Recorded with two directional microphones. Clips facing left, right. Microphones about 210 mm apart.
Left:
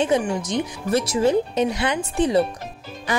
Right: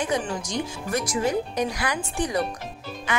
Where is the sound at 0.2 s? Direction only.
10° left (ahead or behind).